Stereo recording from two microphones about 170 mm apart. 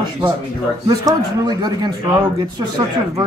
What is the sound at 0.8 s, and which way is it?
A man's voice, 25° right (ahead or behind).